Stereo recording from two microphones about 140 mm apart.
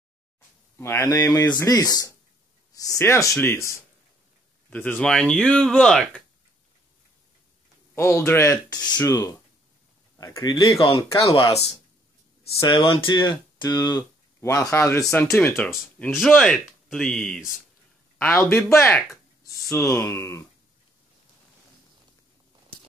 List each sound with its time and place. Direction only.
0.7 s speech: 15° left (ahead or behind)
7.9 s speech: 20° left (ahead or behind)
12.5 s speech: 30° left (ahead or behind)